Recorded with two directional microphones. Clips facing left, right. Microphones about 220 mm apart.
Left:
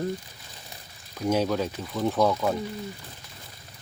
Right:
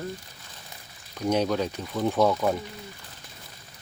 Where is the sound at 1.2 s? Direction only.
5° left (ahead or behind).